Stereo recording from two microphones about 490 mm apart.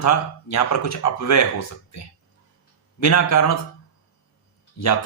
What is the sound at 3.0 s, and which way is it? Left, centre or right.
Speech, left.